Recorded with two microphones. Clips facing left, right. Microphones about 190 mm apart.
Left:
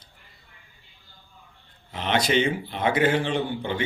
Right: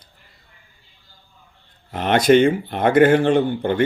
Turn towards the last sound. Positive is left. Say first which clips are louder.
# right 8 dB
turn(degrees=-50)  # may be behind; listen again after turning